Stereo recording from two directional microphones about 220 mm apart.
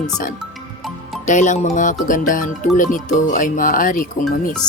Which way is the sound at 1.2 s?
35° left (ahead or behind).